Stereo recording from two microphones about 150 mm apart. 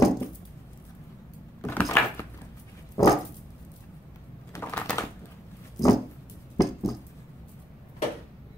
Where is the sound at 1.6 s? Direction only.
15° left (ahead or behind).